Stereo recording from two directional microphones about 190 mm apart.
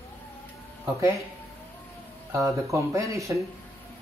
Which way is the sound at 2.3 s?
15° right (ahead or behind).